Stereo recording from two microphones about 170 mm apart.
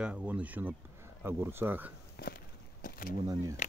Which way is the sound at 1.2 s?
15° right (ahead or behind).